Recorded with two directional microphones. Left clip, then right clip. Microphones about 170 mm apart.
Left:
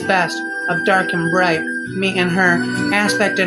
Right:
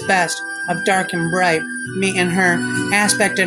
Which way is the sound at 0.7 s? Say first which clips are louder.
Left 2 dB; 45° right (ahead or behind).